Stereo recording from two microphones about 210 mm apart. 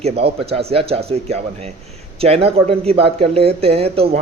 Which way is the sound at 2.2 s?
30° right (ahead or behind).